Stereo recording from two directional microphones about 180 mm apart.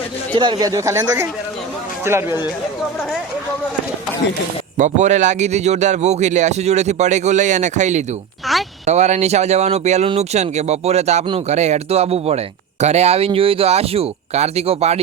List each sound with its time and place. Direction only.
0.3 s speech: 25° right (ahead or behind)
4.8 s speech: 40° right (ahead or behind)